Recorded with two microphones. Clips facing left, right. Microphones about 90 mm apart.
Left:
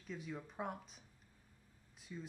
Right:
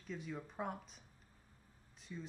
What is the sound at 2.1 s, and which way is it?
Speech, 5° left (ahead or behind).